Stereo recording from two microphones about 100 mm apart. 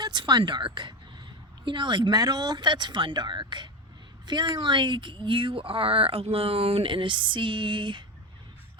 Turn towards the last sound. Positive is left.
turn(degrees=-55)  # may be behind; listen again after turning